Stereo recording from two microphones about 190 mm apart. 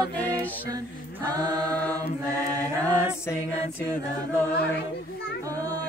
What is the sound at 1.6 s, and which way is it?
Mantra, 5° left (ahead or behind).